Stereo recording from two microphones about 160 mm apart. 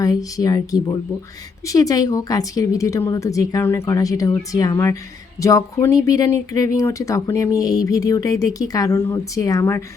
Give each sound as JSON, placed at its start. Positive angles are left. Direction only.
{"t": 0.0, "sound": "speech", "side_deg": 20}